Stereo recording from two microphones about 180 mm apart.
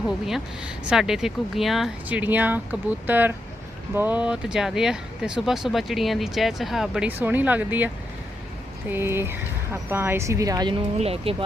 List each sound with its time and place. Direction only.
0.9 s speech: centre (ahead or behind)
8.9 s speech: 10° right (ahead or behind); by 11.4 s 35° right (ahead or behind)